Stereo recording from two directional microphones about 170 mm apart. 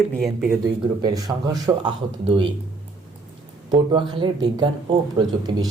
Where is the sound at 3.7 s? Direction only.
25° right (ahead or behind).